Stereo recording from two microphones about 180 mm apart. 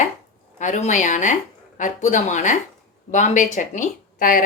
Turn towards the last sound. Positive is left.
turn(degrees=45)  # may be behind; listen again after turning